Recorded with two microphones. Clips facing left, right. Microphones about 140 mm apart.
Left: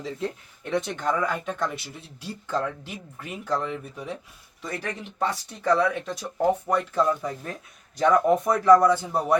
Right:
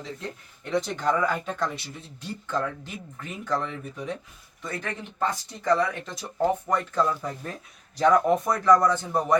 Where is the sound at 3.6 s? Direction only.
5° left (ahead or behind).